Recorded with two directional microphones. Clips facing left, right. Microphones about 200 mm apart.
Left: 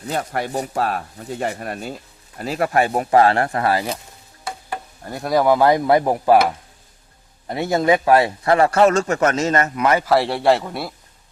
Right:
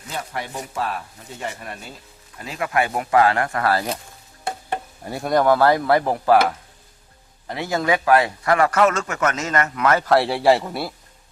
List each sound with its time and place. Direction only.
0.0 s speech: 40° left (ahead or behind)
3.6 s a man's voice: 20° left (ahead or behind)
5.1 s speech: centre (ahead or behind); by 6.4 s 20° left (ahead or behind)
7.4 s a man's voice: 25° left (ahead or behind)
10.1 s speech: centre (ahead or behind)